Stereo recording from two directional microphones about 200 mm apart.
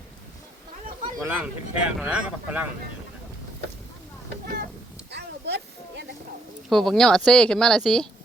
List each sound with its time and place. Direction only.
1.2 s speech: 10° right (ahead or behind)
5.1 s a sound: 55° right (ahead or behind)
6.7 s speech: centre (ahead or behind)